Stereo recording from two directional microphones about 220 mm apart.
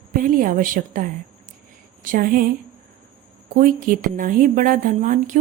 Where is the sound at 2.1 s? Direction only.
40° right (ahead or behind).